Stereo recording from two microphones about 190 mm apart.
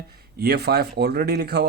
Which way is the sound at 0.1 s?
55° right (ahead or behind).